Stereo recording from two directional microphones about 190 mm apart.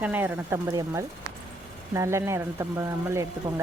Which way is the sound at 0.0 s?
10° right (ahead or behind).